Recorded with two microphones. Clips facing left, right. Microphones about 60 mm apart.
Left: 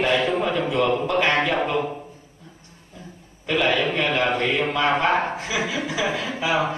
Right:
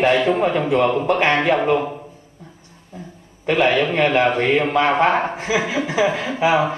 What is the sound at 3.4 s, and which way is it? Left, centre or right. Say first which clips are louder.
A man's voice: right 4 dB; right.